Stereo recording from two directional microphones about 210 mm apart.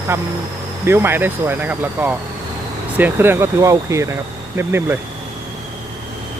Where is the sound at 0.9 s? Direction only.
10° right (ahead or behind).